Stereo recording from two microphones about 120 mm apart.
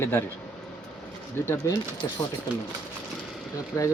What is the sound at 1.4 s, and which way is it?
Speech, 20° left (ahead or behind).